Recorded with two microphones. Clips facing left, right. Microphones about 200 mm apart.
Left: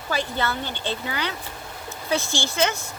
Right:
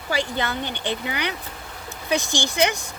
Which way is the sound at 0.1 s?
15° right (ahead or behind).